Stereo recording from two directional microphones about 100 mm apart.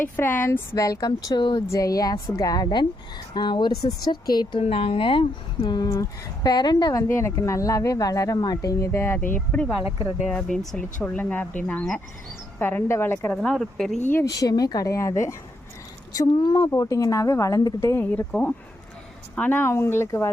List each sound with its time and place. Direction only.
0.0 s speech: 20° left (ahead or behind); by 1.6 s 45° left (ahead or behind)
1.6 s speech: 35° left (ahead or behind)
4.6 s speech: 80° left; by 7.0 s 45° left (ahead or behind)
7.1 s speech: 25° left (ahead or behind)
13.3 s speech: 5° left (ahead or behind)
14.3 s speech: 40° left (ahead or behind)
16.7 s speech: 35° left (ahead or behind)
17.7 s speech: 25° left (ahead or behind)
19.4 s speech: 20° left (ahead or behind)